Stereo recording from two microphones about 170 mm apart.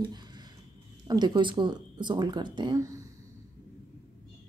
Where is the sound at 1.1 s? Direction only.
25° right (ahead or behind).